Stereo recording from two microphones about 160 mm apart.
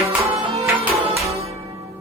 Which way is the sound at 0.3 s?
40° right (ahead or behind).